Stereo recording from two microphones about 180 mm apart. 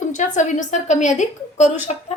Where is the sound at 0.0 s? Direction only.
45° left (ahead or behind).